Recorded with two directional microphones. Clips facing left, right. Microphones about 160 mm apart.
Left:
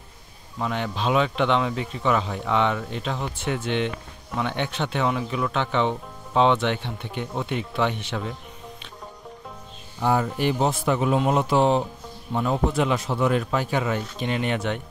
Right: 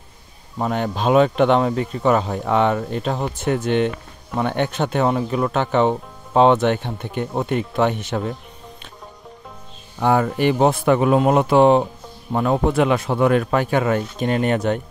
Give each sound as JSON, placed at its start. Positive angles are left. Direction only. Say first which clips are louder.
{"t": 0.6, "sound": "speech", "louder": "right 5 dB", "side_deg": -45}
{"t": 9.9, "sound": "a man's voice", "louder": "right 5 dB", "side_deg": -65}